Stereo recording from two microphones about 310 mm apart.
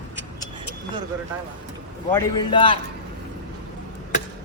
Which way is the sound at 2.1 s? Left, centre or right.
Centre.